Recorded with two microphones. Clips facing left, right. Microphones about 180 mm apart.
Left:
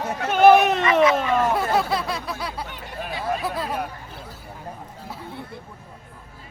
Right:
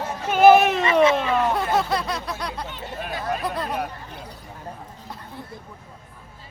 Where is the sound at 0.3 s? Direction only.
5° right (ahead or behind).